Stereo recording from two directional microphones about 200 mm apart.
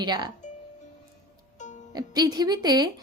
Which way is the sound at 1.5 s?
35° left (ahead or behind).